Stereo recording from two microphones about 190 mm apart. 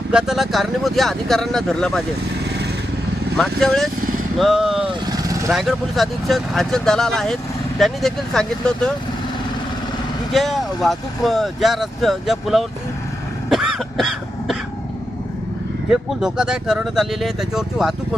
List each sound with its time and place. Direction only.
0.1 s speech: 5° right (ahead or behind)
3.3 s vehicle: 60° right (ahead or behind)
3.6 s speech: centre (ahead or behind)
5.0 s vehicle: 20° right (ahead or behind)
5.5 s speech: centre (ahead or behind)
10.3 s speech: centre (ahead or behind)
13.5 s cough: centre (ahead or behind)
15.9 s speech: 5° right (ahead or behind)